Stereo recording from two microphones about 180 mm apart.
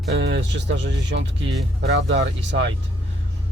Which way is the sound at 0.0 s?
80° right.